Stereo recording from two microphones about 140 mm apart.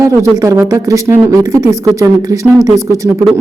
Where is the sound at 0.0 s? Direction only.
20° right (ahead or behind).